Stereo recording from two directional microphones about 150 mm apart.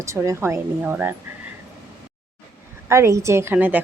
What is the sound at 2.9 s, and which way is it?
Speech, 20° right (ahead or behind).